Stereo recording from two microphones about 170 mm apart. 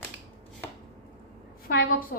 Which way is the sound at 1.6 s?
60° left (ahead or behind).